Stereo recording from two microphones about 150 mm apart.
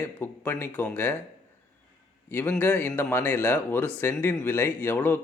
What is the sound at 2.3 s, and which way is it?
Speech, 15° left (ahead or behind).